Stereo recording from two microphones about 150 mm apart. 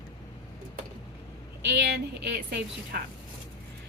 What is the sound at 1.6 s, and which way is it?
A woman's voice, 90° right.